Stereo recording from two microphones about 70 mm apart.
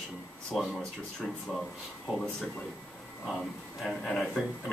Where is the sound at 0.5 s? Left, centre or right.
Centre.